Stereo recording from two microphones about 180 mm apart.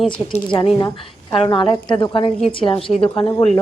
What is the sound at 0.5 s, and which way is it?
A woman's voice, 20° left (ahead or behind).